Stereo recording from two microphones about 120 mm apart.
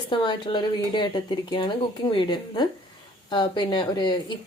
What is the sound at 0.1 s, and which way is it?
Speech, 40° left (ahead or behind).